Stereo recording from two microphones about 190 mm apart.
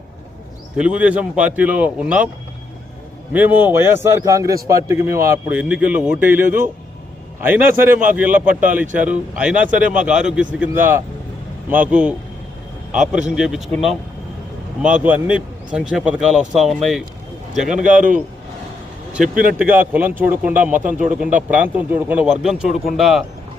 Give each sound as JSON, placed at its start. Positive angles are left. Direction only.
{"t": 0.8, "sound": "a man's voice", "side_deg": -5}
{"t": 3.3, "sound": "a man's voice", "side_deg": -10}
{"t": 17.8, "sound": "speech", "side_deg": -45}
{"t": 19.5, "sound": "a man's voice", "side_deg": -10}
{"t": 20.7, "sound": "speech", "side_deg": -45}
{"t": 21.5, "sound": "a man's voice", "side_deg": -10}